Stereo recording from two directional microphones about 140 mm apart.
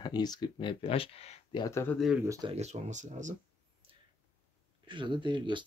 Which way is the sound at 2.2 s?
25° right (ahead or behind).